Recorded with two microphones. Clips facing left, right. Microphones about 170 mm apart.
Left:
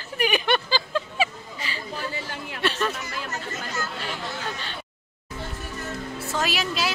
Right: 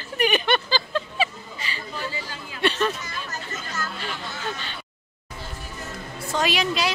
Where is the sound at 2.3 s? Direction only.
70° left (ahead or behind).